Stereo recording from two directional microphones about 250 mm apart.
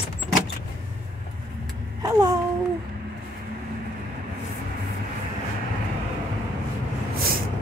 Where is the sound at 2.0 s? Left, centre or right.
Centre.